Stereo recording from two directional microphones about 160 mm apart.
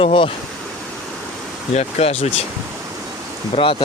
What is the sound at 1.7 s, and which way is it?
Speech, 45° left (ahead or behind).